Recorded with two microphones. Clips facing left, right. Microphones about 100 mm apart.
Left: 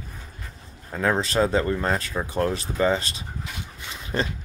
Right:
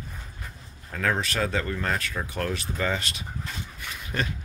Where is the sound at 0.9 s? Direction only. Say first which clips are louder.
Left 4 dB; 25° left (ahead or behind).